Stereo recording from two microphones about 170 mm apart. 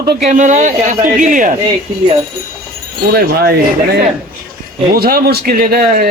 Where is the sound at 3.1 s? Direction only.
65° right (ahead or behind).